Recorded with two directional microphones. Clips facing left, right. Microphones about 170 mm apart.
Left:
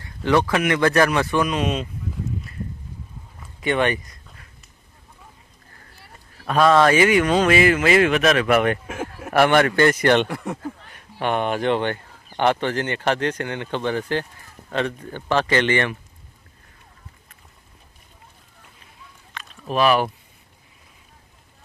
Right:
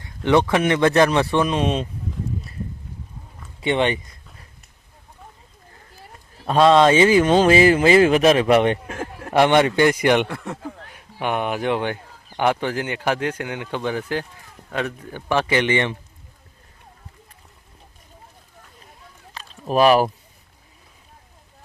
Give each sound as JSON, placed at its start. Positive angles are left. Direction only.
{"t": 0.0, "sound": "speech", "side_deg": -20}
{"t": 3.6, "sound": "speech", "side_deg": -25}
{"t": 6.3, "sound": "speech", "side_deg": -20}
{"t": 8.9, "sound": "a sound", "side_deg": 10}
{"t": 9.3, "sound": "speech", "side_deg": -20}
{"t": 10.2, "sound": "speech", "side_deg": 15}
{"t": 10.6, "sound": "a man's voice", "side_deg": -10}
{"t": 19.3, "sound": "a sound", "side_deg": -35}